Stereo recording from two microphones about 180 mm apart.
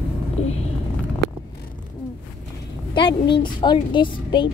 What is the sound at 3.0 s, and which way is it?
Speech, 25° left (ahead or behind).